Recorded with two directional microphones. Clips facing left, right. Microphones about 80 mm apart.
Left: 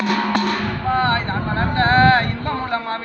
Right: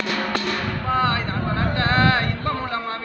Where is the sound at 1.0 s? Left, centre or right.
Left.